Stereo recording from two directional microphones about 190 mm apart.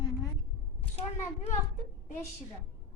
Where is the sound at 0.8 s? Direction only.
30° left (ahead or behind).